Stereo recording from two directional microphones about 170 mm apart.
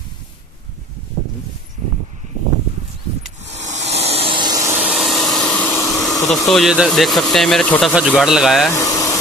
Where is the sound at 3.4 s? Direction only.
90° right.